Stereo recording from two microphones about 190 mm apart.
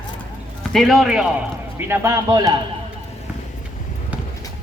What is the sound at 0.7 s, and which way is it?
Speech, centre (ahead or behind).